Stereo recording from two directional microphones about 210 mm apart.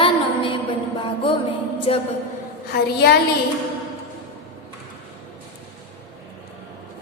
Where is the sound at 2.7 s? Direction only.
50° left (ahead or behind).